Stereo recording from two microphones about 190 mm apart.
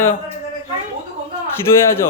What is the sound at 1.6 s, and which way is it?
Speech, 15° left (ahead or behind).